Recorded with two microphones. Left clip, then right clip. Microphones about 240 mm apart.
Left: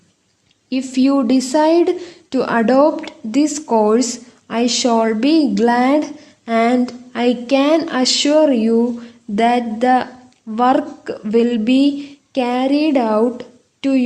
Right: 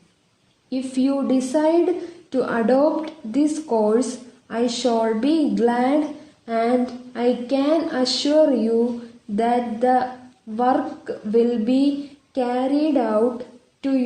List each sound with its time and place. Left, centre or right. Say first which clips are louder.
0.7 s a woman's voice: left 6 dB; left